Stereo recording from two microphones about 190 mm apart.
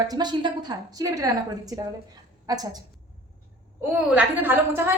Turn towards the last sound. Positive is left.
turn(degrees=-10)  # may be behind; listen again after turning